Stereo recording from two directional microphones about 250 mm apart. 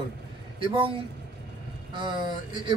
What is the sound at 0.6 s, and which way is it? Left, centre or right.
Speech, centre.